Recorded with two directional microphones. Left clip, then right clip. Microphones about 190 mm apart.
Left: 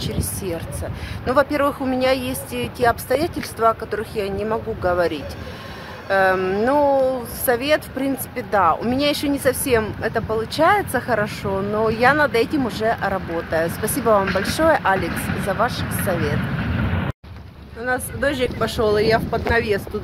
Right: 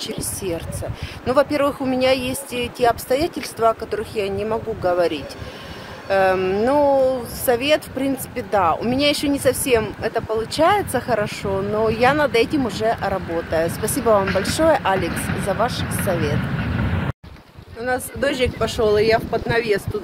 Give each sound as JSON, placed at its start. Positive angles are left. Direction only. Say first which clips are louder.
{"t": 0.0, "sound": "speech", "louder": "right 1 dB", "side_deg": 0}
{"t": 15.0, "sound": "speech", "louder": "right 1 dB", "side_deg": 15}
{"t": 15.6, "sound": "speech", "louder": "left 1 dB", "side_deg": 5}
{"t": 17.8, "sound": "speech", "louder": "even", "side_deg": 0}